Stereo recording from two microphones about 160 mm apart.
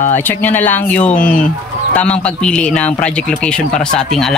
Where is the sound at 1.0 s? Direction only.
45° left (ahead or behind).